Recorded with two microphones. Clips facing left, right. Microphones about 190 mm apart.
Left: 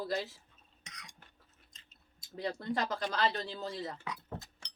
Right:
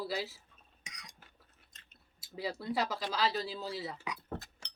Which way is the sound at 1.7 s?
60° right (ahead or behind).